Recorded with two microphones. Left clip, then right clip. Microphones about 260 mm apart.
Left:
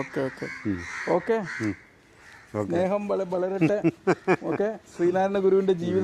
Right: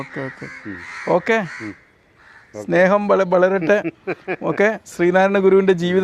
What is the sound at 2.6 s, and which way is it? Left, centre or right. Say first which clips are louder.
Speech: right 12 dB; right.